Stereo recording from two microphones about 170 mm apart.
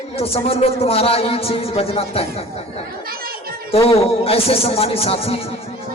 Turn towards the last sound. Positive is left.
turn(degrees=35)  # may be behind; listen again after turning